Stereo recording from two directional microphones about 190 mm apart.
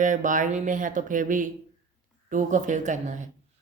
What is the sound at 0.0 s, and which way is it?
A woman's voice, 45° right (ahead or behind).